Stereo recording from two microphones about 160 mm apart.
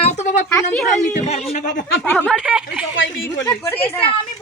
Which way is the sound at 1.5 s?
50° left (ahead or behind).